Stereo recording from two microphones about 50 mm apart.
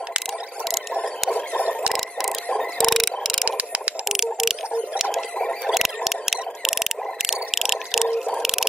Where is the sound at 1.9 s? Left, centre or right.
Centre.